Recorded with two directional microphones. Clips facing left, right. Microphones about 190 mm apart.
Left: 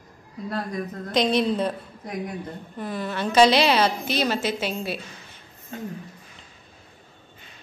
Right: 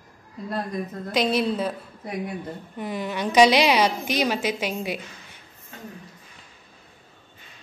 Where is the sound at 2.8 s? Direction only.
15° right (ahead or behind).